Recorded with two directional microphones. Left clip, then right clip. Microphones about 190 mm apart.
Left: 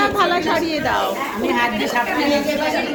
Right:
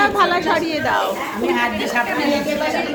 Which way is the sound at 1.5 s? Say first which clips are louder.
Left 2 dB; 55° right (ahead or behind).